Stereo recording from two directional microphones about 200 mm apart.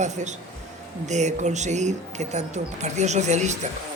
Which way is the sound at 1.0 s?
35° right (ahead or behind).